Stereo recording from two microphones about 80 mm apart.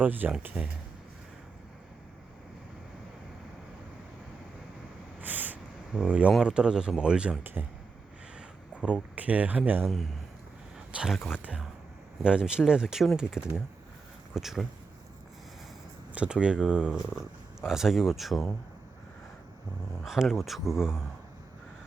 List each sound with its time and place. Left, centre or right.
0.0 s speech: right
5.2 s a sound: right
6.1 s speech: centre
8.4 s a sound: centre
9.1 s speech: centre
9.8 s speech: centre
16.1 s speech: centre
20.0 s speech: centre